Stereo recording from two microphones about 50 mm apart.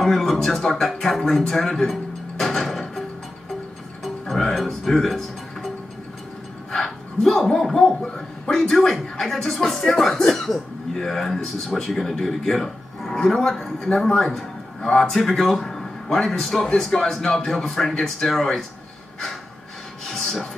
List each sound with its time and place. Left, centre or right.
0.0 s a man's voice: centre
4.0 s music: centre
4.6 s speech: centre
6.7 s a man's voice: centre
20.1 s a sound: centre